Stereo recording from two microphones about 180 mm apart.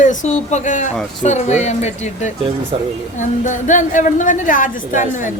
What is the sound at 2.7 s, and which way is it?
Speech, 30° right (ahead or behind).